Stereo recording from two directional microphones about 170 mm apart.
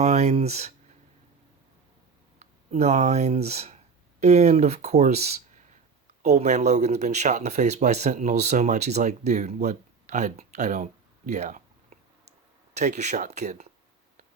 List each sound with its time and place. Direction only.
0.0 s speech: 40° right (ahead or behind)
2.4 s speech: 40° right (ahead or behind)
11.3 s a sound: 45° right (ahead or behind)
12.7 s speech: 45° right (ahead or behind)